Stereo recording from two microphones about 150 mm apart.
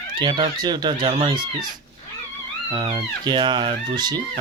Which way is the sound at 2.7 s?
35° right (ahead or behind).